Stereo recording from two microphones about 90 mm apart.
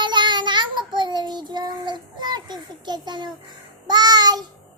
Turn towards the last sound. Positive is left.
turn(degrees=-50)  # may be behind; listen again after turning